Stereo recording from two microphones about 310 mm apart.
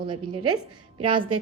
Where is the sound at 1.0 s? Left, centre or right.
Centre.